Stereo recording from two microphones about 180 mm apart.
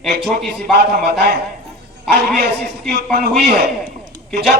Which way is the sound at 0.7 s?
65° right (ahead or behind).